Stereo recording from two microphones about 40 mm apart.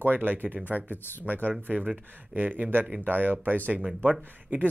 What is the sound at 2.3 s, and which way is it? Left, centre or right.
Speech, right.